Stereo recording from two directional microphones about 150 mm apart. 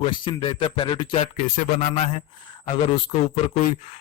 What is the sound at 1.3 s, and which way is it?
Speech, 60° left (ahead or behind).